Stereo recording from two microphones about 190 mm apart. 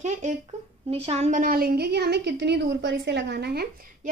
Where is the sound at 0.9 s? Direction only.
35° right (ahead or behind).